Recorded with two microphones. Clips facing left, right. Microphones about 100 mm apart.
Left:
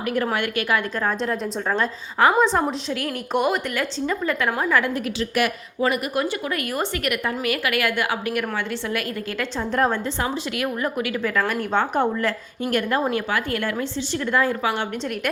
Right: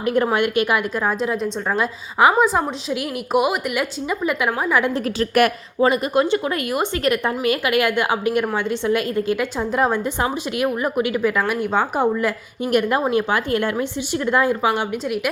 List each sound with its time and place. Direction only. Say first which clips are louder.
0.0 s a woman's voice: right 5 dB; 25° right (ahead or behind)
5.8 s a woman's voice: right 5 dB; 25° right (ahead or behind); by 10.0 s 10° right (ahead or behind)
10.2 s a woman's voice: right 4 dB; 20° right (ahead or behind)
12.7 s a woman's voice: right 4 dB; 15° right (ahead or behind)